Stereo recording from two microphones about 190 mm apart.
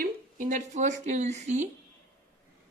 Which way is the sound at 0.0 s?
45° right (ahead or behind).